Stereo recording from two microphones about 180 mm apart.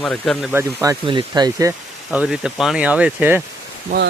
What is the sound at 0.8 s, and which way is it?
Speech, 25° right (ahead or behind).